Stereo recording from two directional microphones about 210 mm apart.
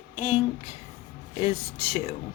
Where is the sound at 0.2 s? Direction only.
25° left (ahead or behind).